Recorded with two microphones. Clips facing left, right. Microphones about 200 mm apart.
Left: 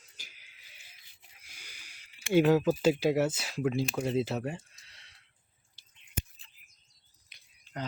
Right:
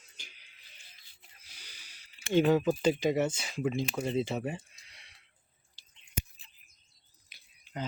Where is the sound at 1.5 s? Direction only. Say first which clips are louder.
Left 2 dB; 10° left (ahead or behind).